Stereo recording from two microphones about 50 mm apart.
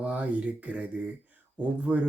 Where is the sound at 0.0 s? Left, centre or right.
Right.